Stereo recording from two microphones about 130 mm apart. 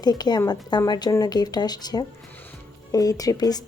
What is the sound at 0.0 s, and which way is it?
Speech, 30° left (ahead or behind).